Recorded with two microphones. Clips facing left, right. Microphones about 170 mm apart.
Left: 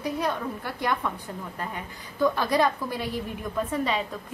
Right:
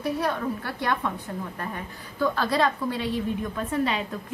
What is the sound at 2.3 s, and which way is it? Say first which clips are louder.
Speech: even; 15° left (ahead or behind).